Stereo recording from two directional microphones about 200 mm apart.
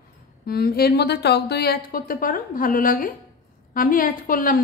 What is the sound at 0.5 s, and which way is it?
A woman's voice, 50° left (ahead or behind).